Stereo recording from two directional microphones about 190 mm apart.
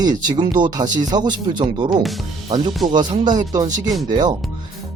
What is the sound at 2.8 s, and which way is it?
Speech, 20° right (ahead or behind).